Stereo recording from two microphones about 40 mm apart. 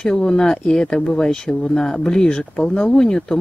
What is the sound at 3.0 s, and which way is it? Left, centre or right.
Speech, centre.